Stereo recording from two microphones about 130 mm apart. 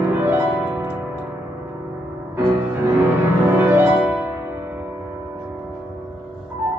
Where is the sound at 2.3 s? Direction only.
20° right (ahead or behind).